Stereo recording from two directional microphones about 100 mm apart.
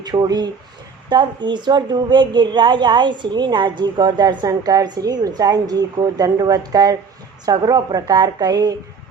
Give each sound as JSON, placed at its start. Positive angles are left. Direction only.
{"t": 0.0, "sound": "a woman's voice", "side_deg": -45}